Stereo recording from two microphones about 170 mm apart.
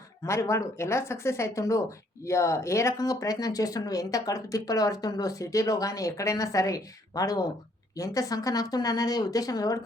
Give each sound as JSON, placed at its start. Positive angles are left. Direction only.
{"t": 0.3, "sound": "speech", "side_deg": 15}